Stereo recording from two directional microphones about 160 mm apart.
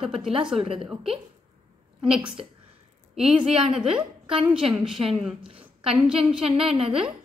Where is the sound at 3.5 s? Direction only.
35° right (ahead or behind).